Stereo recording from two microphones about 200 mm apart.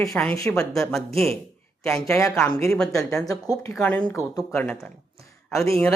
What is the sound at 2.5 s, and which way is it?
Speech, 15° left (ahead or behind).